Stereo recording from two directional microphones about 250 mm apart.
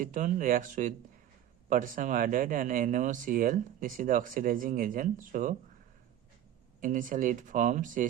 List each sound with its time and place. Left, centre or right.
0.0 s speech: right
6.8 s speech: right